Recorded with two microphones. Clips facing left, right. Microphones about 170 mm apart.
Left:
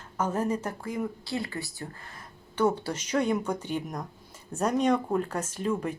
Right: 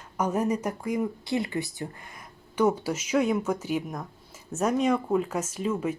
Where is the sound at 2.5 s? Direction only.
10° right (ahead or behind).